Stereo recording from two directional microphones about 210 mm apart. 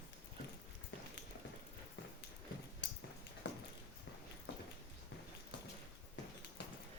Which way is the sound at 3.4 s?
55° left (ahead or behind).